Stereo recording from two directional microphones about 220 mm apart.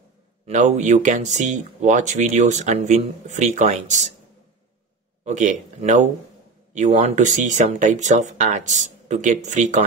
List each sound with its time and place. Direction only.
0.5 s speech: 35° right (ahead or behind)
5.2 s speech: 35° right (ahead or behind)